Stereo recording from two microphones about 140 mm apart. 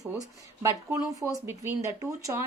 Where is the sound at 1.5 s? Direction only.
20° right (ahead or behind).